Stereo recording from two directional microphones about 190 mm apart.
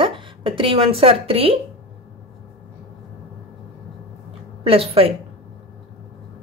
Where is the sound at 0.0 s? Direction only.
25° right (ahead or behind).